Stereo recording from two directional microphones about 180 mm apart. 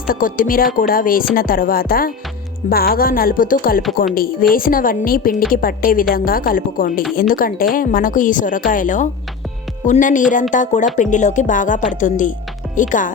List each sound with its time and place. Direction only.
0.1 s a woman's voice: 50° left (ahead or behind)